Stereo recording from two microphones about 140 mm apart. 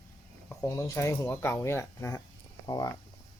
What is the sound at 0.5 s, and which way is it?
Speech, 20° left (ahead or behind).